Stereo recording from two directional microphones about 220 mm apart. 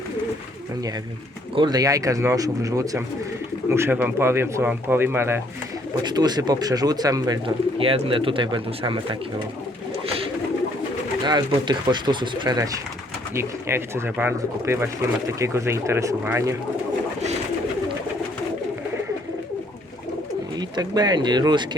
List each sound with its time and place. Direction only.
1.5 s speech: 20° right (ahead or behind)
11.3 s speech: 20° right (ahead or behind)
20.6 s speech: 20° right (ahead or behind)